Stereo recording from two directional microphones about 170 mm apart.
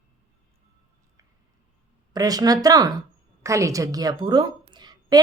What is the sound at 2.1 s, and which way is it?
A woman's voice, 20° right (ahead or behind).